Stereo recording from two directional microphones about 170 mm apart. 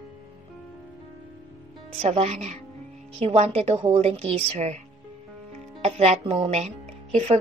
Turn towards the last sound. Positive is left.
turn(degrees=-40)  # may be behind; listen again after turning